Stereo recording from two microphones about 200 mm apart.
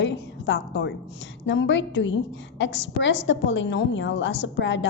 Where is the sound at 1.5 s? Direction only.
65° left (ahead or behind).